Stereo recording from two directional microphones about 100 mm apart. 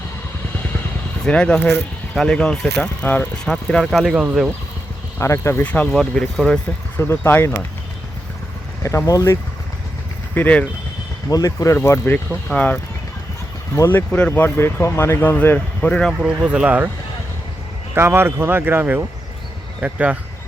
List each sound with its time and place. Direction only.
1.2 s speech: 10° left (ahead or behind)
2.8 s speech: 15° left (ahead or behind); by 4.2 s centre (ahead or behind)
5.2 s speech: 30° left (ahead or behind)
5.6 s speech: 15° left (ahead or behind)
5.9 s speech: 5° left (ahead or behind)
6.9 s speech: 20° left (ahead or behind)
9.0 s speech: 35° left (ahead or behind)
10.3 s speech: 15° left (ahead or behind)
11.3 s speech: 40° left (ahead or behind)
14.1 s speech: 10° left (ahead or behind)
15.4 s speech: 15° left (ahead or behind)
16.2 s speech: 10° right (ahead or behind)
17.9 s speech: 25° right (ahead or behind)
19.8 s speech: 15° right (ahead or behind)